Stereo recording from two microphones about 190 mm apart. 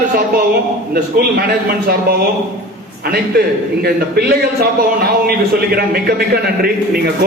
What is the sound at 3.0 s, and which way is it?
A man's voice, 55° right (ahead or behind).